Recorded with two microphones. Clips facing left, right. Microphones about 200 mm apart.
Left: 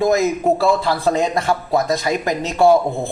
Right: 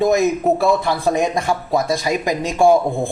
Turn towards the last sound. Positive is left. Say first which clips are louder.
# even
turn(degrees=-15)  # may be behind; listen again after turning